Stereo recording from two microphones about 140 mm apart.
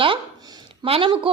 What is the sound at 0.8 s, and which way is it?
Speech, 40° right (ahead or behind).